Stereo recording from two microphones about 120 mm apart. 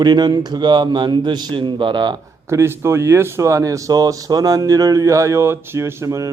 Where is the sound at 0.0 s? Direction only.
35° right (ahead or behind).